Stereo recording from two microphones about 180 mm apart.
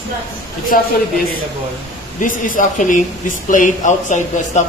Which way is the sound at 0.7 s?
50° left (ahead or behind).